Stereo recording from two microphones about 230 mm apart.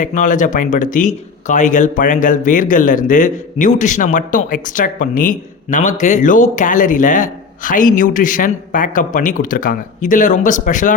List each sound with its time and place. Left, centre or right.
0.0 s speech: left